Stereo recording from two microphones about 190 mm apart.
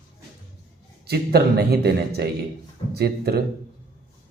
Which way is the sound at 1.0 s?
55° right (ahead or behind).